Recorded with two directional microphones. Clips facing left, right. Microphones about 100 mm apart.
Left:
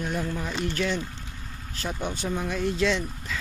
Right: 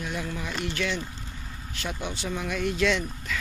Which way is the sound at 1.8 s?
40° left (ahead or behind).